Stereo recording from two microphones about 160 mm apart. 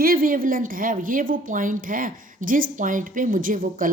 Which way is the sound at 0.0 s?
65° right (ahead or behind).